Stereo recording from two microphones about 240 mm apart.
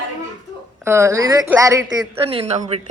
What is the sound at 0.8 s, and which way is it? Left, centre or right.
A woman's voice, centre.